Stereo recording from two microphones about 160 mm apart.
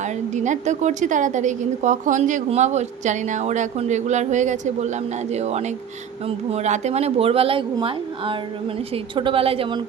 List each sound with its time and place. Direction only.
0.0 s a woman's voice: 50° right (ahead or behind); by 9.8 s 35° right (ahead or behind)